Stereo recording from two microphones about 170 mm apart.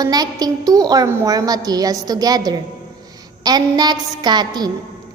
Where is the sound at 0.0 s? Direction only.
20° right (ahead or behind).